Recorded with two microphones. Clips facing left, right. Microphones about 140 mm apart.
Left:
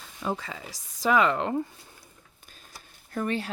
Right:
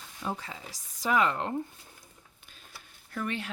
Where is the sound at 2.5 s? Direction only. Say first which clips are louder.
Left 2 dB; 40° left (ahead or behind).